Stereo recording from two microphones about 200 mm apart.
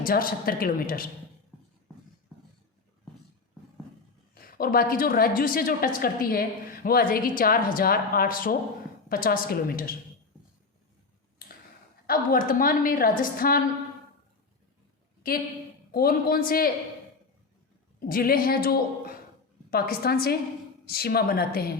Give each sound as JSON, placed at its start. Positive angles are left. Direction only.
{"t": 0.0, "sound": "a woman's voice", "side_deg": 45}
{"t": 4.5, "sound": "a woman's voice", "side_deg": 45}
{"t": 12.0, "sound": "a woman's voice", "side_deg": 45}
{"t": 15.9, "sound": "a woman's voice", "side_deg": 50}
{"t": 18.1, "sound": "a woman's voice", "side_deg": 45}